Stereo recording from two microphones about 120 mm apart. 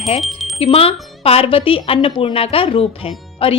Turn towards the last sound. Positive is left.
turn(degrees=50)  # may be behind; listen again after turning